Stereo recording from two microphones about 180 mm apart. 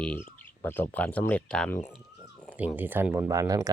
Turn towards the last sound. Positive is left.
turn(degrees=-20)  # may be behind; listen again after turning